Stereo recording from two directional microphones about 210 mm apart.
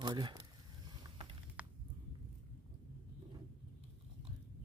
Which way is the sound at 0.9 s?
20° right (ahead or behind).